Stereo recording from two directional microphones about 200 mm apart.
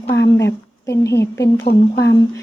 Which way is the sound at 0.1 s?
15° left (ahead or behind).